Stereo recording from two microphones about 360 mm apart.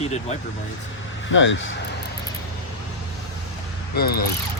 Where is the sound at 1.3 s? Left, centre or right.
Left.